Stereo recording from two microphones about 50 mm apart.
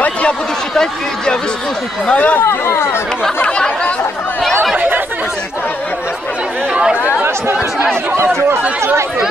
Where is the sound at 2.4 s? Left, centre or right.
Left.